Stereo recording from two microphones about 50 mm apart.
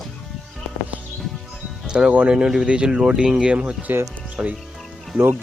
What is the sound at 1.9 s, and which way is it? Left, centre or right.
Speech, centre.